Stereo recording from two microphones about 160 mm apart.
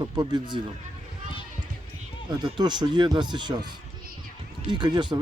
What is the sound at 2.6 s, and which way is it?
Speech, 25° right (ahead or behind).